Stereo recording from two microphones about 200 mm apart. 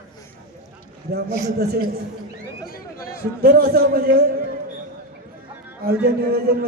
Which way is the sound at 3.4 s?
50° right (ahead or behind).